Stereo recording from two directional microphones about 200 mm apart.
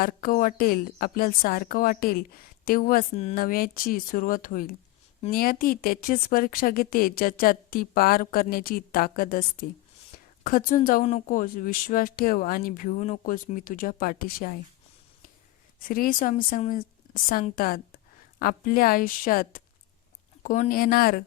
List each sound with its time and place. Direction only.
0.0 s speech: 45° left (ahead or behind)
15.9 s speech: 45° left (ahead or behind)